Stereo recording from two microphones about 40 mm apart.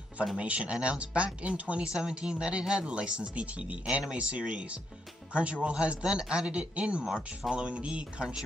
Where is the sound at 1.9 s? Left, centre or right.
Right.